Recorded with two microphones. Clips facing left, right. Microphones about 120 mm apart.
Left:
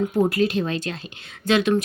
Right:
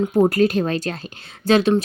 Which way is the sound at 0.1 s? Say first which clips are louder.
Right 4 dB; 40° right (ahead or behind).